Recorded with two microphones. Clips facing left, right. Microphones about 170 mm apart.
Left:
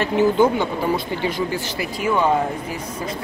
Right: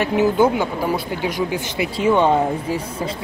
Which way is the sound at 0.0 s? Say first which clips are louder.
Even; 10° right (ahead or behind).